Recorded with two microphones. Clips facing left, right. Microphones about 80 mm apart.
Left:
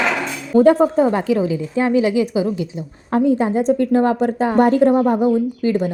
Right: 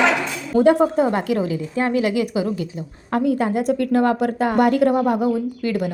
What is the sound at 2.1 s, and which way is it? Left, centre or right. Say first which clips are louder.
Speech: left 3 dB; right.